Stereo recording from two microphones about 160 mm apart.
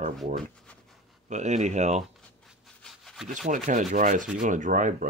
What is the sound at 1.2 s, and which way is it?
Speech, 45° right (ahead or behind).